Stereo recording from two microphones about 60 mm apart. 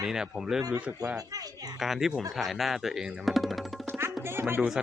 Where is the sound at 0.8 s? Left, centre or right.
Centre.